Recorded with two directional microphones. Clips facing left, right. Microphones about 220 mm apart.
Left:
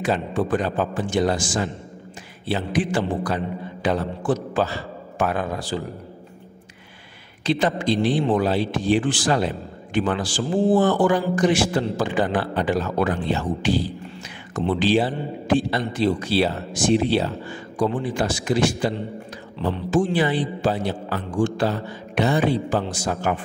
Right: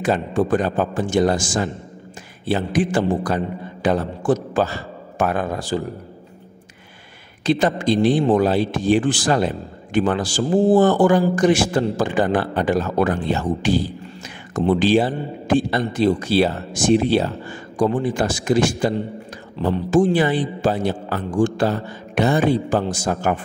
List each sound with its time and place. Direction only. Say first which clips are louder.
0.0 s a man's voice: right 3 dB; 45° right (ahead or behind)
7.4 s a man's voice: right 3 dB; 45° right (ahead or behind)